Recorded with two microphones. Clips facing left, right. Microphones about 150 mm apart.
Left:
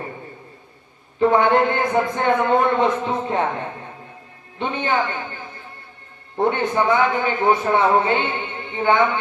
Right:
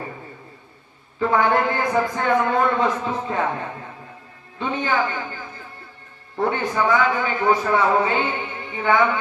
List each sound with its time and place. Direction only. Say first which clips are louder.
1.2 s a man's voice: left 3 dB; 25° left (ahead or behind)
4.5 s a man's voice: left 1 dB; 25° left (ahead or behind)
6.4 s a man's voice: left 2 dB; 25° left (ahead or behind)